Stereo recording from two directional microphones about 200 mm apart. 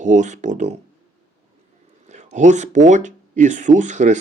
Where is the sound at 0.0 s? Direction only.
40° right (ahead or behind).